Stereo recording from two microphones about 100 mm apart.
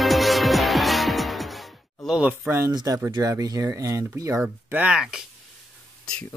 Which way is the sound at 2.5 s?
25° right (ahead or behind).